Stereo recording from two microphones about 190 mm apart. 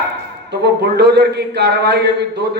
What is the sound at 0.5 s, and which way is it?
Speech, 60° right (ahead or behind).